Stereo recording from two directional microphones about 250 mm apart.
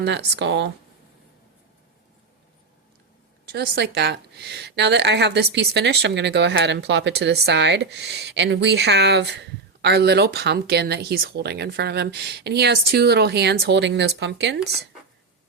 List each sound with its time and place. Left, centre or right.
0.0 s speech: right
3.5 s a woman's voice: right